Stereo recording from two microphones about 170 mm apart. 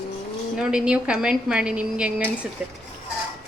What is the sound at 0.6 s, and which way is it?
A woman's voice, 5° right (ahead or behind).